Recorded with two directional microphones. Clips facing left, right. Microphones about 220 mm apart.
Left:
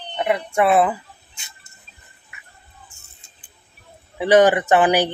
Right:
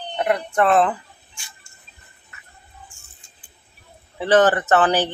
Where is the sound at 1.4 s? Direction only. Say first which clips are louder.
Right 1 dB; 20° left (ahead or behind).